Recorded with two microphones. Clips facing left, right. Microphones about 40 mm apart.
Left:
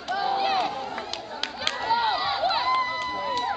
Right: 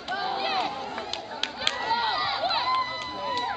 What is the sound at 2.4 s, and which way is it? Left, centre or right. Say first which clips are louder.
Run: left 3 dB; centre.